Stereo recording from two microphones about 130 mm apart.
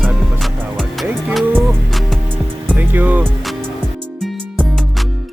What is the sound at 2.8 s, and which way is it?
Speech, 15° right (ahead or behind).